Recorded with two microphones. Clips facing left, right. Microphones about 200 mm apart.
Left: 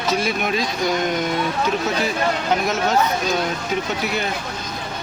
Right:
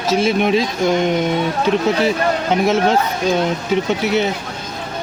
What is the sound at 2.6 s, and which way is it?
Speech, 30° right (ahead or behind).